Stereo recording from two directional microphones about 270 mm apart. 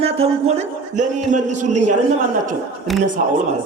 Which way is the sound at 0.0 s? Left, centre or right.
Right.